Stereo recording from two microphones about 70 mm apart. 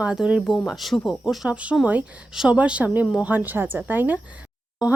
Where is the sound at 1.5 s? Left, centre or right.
Centre.